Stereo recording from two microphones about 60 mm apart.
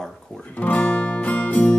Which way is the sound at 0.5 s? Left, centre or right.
Left.